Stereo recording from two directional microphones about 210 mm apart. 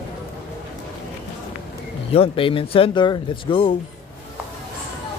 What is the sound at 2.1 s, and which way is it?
Speech, 25° left (ahead or behind).